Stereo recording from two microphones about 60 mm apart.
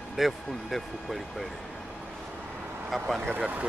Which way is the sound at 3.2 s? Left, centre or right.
Right.